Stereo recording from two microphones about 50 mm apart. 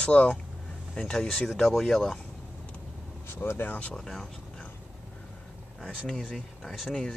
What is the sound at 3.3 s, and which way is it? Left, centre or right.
Speech, left.